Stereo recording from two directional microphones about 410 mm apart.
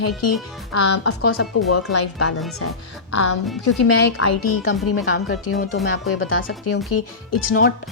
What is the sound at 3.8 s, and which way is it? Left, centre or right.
Speech, left.